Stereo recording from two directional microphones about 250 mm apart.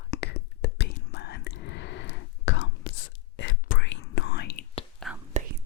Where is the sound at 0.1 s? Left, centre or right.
Left.